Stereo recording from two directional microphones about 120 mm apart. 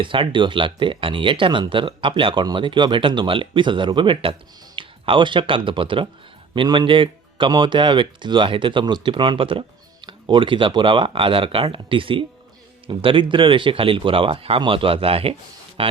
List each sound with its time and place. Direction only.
0.0 s speech: 45° right (ahead or behind)